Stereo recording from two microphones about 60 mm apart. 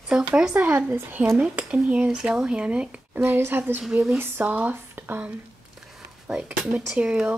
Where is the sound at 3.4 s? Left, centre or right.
Right.